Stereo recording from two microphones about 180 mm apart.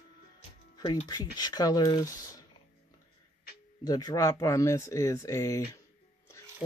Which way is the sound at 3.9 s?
20° left (ahead or behind).